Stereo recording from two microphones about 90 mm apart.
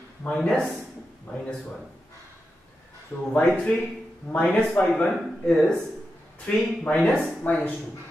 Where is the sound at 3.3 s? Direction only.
15° left (ahead or behind).